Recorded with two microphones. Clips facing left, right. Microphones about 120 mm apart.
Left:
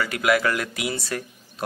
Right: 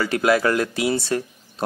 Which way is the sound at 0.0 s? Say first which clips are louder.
Right 3 dB; 30° right (ahead or behind).